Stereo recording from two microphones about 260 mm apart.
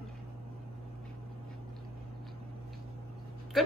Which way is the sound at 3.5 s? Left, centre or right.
Centre.